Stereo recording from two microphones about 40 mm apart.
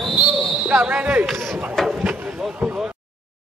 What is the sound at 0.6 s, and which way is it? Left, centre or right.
Speech, right.